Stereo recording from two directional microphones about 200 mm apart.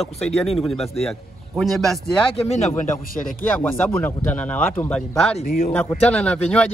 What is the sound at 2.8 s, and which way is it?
Speech, 45° left (ahead or behind).